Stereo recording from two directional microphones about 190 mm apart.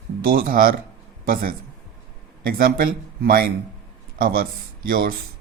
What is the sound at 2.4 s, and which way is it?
Speech, 50° right (ahead or behind).